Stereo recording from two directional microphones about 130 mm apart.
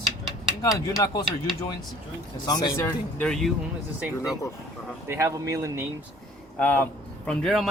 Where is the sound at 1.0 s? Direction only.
30° left (ahead or behind).